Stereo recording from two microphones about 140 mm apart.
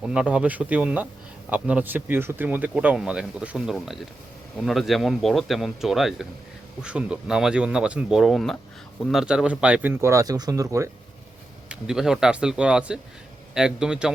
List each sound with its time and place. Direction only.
0.0 s speech: 5° right (ahead or behind); by 10.8 s 20° right (ahead or behind)
11.7 s speech: 5° right (ahead or behind)